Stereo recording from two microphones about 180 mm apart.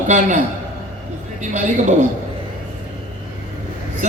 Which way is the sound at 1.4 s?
45° right (ahead or behind).